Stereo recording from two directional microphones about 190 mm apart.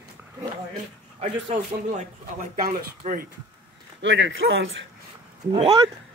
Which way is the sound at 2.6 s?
50° right (ahead or behind).